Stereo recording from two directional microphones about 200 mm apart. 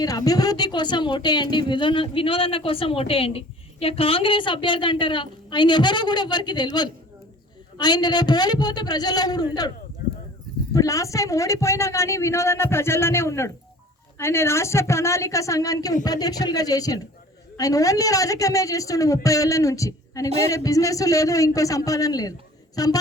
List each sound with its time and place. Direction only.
0.0 s speech: 20° left (ahead or behind)
10.8 s speech: 15° left (ahead or behind)